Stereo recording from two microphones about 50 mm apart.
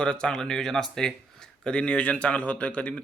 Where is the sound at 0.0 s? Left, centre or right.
Centre.